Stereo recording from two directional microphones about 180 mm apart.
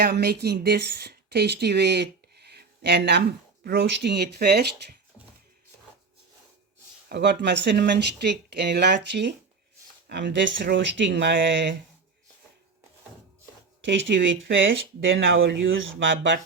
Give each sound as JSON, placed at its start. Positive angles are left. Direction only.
{"t": 0.0, "sound": "a woman's voice", "side_deg": -60}
{"t": 7.1, "sound": "speech", "side_deg": -75}
{"t": 10.3, "sound": "speech", "side_deg": -75}
{"t": 13.8, "sound": "speech", "side_deg": -85}